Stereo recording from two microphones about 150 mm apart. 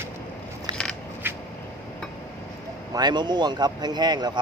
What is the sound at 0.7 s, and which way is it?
Scissors, 30° right (ahead or behind).